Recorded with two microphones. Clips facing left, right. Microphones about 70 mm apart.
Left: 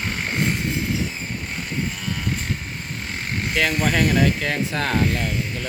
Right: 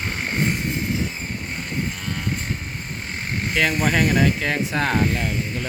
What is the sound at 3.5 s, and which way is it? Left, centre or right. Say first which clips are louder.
Speech: right 1 dB; right.